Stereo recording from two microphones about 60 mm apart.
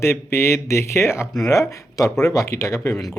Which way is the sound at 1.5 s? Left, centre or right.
Left.